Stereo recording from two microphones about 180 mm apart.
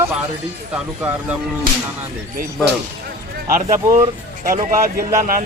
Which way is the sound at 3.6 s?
45° right (ahead or behind).